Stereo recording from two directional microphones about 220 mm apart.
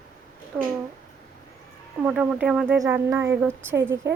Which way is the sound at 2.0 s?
5° right (ahead or behind).